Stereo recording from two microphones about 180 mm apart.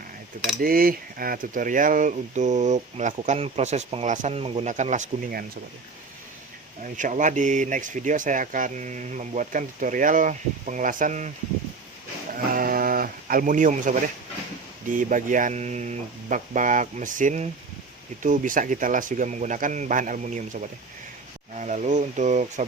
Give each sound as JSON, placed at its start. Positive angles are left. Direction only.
{"t": 0.6, "sound": "speech", "side_deg": -55}
{"t": 6.8, "sound": "speech", "side_deg": -45}
{"t": 12.3, "sound": "a sound", "side_deg": -50}
{"t": 14.8, "sound": "speech", "side_deg": -45}